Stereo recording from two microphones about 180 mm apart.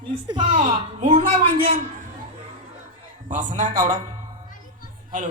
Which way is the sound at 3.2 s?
45° right (ahead or behind).